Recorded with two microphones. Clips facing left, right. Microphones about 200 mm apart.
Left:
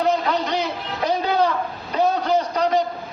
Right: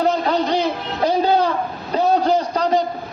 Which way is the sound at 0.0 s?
35° right (ahead or behind).